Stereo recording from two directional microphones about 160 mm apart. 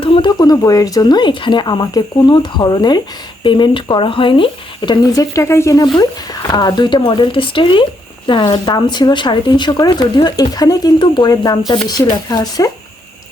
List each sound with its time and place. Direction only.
0.0 s speech: 30° left (ahead or behind)